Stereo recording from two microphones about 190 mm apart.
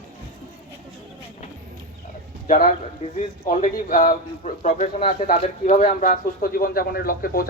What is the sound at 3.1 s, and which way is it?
Speech, 40° left (ahead or behind).